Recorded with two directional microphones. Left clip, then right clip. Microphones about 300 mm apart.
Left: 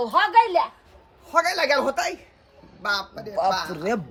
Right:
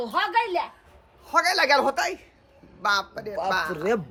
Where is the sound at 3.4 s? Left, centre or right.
Centre.